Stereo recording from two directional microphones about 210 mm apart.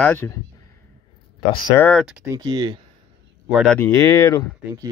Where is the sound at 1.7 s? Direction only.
10° left (ahead or behind).